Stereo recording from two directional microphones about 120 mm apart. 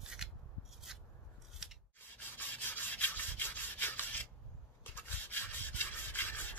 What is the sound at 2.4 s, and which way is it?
Rub, 15° left (ahead or behind).